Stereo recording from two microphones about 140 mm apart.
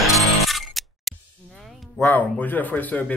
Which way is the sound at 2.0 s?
5° left (ahead or behind).